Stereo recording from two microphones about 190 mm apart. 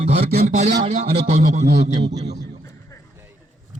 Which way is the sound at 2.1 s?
65° right (ahead or behind).